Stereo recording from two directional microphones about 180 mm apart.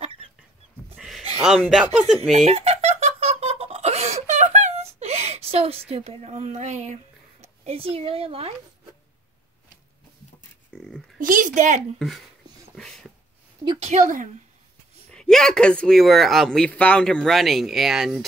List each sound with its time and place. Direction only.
0.9 s a sound: centre (ahead or behind)
1.4 s a man's voice: 5° right (ahead or behind)
2.4 s laughter: 35° right (ahead or behind)
5.9 s a woman's voice: 35° right (ahead or behind)
11.1 s speech: 50° right (ahead or behind)
12.7 s a sound: 5° left (ahead or behind)
13.7 s speech: 40° right (ahead or behind)
15.1 s a man's voice: 5° left (ahead or behind)